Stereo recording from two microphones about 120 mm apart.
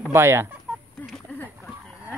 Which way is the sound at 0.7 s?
10° right (ahead or behind).